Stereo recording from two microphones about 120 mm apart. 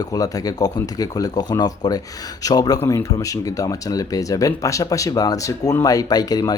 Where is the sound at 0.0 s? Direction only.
30° left (ahead or behind).